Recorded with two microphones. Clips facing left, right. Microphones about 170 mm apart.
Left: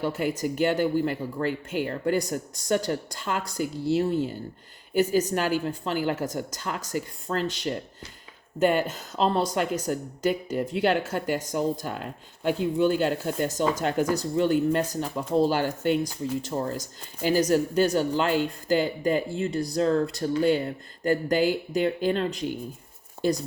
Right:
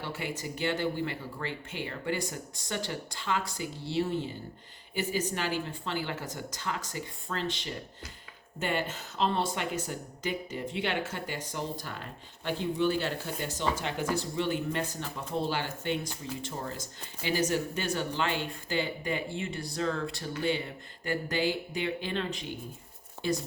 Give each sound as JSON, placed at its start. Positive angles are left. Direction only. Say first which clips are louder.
{"t": 0.0, "sound": "speech", "louder": "left 10 dB", "side_deg": 45}
{"t": 13.0, "sound": "speech", "louder": "left 8 dB", "side_deg": 45}